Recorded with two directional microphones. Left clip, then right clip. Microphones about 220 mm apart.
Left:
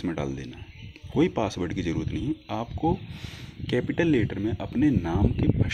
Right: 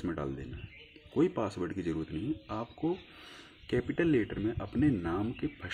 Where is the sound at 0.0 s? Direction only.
35° left (ahead or behind).